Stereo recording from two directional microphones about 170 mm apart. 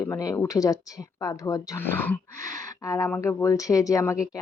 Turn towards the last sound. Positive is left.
turn(degrees=15)  # may be behind; listen again after turning